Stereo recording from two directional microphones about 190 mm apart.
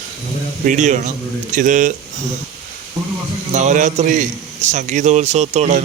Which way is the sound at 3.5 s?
40° right (ahead or behind).